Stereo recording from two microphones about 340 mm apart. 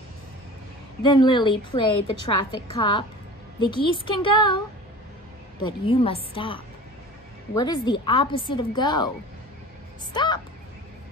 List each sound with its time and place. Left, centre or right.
1.0 s a woman's voice: centre
5.6 s a woman's voice: centre
10.1 s a woman's voice: centre